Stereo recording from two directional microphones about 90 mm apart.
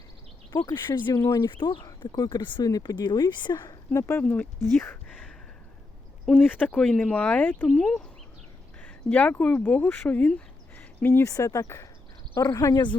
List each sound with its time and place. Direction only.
0.5 s speech: 55° left (ahead or behind)
1.1 s speech: 35° left (ahead or behind)
1.5 s speech: 65° left (ahead or behind)
2.0 s speech: 50° left (ahead or behind)
2.6 s speech: 45° left (ahead or behind)
3.9 s speech: 30° left (ahead or behind)
4.2 s speech: 15° left (ahead or behind)
6.3 s speech: 15° left (ahead or behind)
7.7 s speech: 5° left (ahead or behind); by 11.3 s 25° left (ahead or behind)
11.3 s speech: 35° left (ahead or behind)